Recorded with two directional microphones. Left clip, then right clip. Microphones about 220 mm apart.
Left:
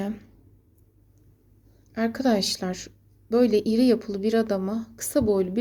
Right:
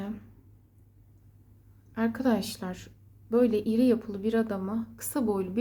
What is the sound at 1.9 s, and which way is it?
A woman's voice, 20° left (ahead or behind).